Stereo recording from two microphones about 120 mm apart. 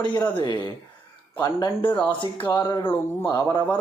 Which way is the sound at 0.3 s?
40° left (ahead or behind).